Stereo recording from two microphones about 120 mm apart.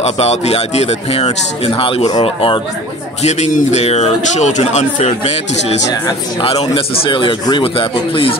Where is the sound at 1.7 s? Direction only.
50° left (ahead or behind).